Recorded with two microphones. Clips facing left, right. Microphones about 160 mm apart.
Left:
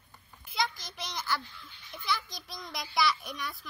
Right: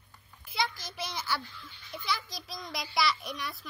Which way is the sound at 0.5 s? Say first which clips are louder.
Even; 5° right (ahead or behind).